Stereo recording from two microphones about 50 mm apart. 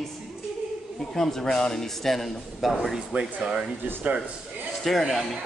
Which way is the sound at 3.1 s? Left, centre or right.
Right.